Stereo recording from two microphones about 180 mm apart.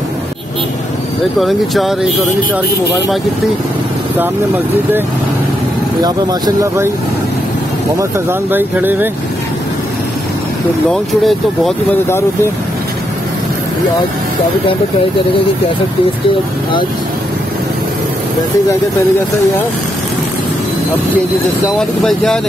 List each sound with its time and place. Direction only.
1.4 s speech: centre (ahead or behind)
6.0 s speech: 20° right (ahead or behind)
8.0 s speech: 10° right (ahead or behind)
10.9 s speech: centre (ahead or behind)
21.7 s speech: 5° left (ahead or behind)